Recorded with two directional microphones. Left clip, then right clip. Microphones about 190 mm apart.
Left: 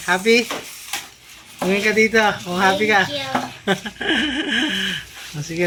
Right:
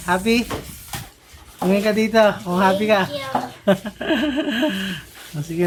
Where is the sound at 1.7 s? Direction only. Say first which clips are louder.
Left 1 dB; 30° right (ahead or behind).